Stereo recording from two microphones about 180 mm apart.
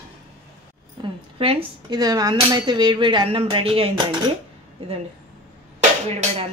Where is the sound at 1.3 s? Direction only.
30° right (ahead or behind).